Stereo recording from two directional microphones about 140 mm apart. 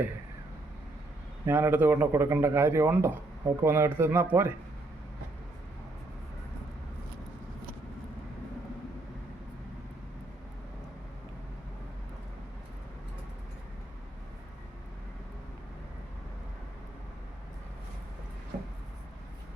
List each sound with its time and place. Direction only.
1.5 s a man's voice: 15° right (ahead or behind)